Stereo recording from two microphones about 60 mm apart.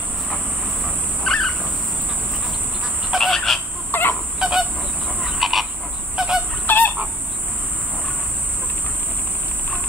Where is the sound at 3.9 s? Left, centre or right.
Left.